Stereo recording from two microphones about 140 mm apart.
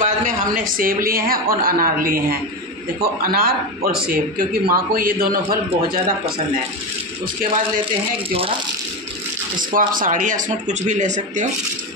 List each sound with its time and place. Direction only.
0.0 s a man's voice: 70° right (ahead or behind); by 6.4 s 90° right
9.6 s speech: 75° right (ahead or behind); by 11.4 s 60° right (ahead or behind)